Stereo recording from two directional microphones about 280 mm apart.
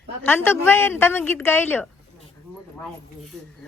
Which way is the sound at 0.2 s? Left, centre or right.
Centre.